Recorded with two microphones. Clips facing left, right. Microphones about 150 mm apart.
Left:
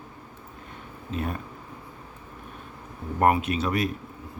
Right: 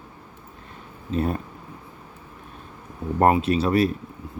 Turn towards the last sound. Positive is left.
turn(degrees=-30)  # may be behind; listen again after turning